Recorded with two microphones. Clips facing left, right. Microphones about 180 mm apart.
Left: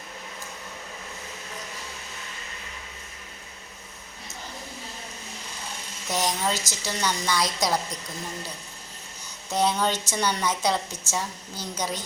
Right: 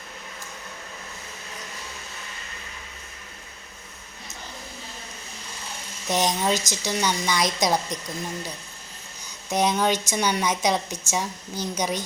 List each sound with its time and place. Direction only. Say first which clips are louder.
6.1 s a woman's voice: right 4 dB; 20° right (ahead or behind)
9.5 s a woman's voice: right 2 dB; 15° right (ahead or behind)